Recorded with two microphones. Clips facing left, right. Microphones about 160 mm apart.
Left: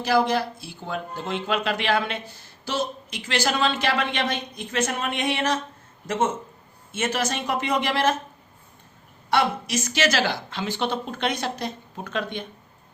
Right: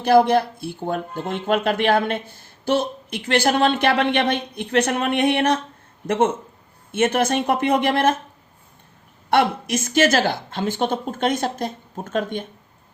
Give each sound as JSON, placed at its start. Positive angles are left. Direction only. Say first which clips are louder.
{"t": 0.0, "sound": "speech", "louder": "right 6 dB", "side_deg": -55}
{"t": 9.3, "sound": "a woman's voice", "louder": "right 4 dB", "side_deg": -55}